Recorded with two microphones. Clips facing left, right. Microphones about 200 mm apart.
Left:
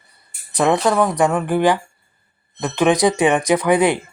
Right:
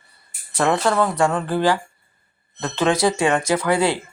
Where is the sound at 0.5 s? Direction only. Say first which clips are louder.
Left 3 dB; 15° left (ahead or behind).